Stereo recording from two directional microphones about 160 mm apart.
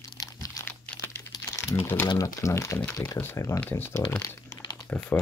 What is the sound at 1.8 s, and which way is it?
Speech, 15° left (ahead or behind).